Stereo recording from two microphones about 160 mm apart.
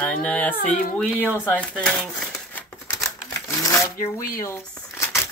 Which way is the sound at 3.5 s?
20° left (ahead or behind).